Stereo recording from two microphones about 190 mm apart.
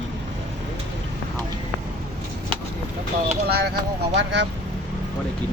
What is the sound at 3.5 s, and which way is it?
Speech, 55° right (ahead or behind).